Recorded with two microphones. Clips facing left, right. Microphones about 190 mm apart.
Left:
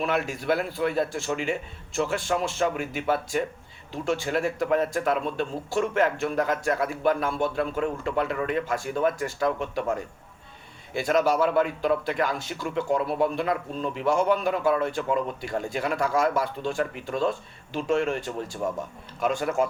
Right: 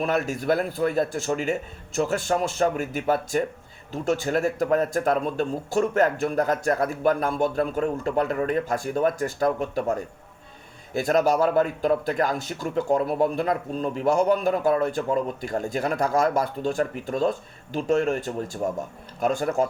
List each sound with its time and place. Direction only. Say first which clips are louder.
0.0 s a man's voice: right 2 dB; 45° right (ahead or behind)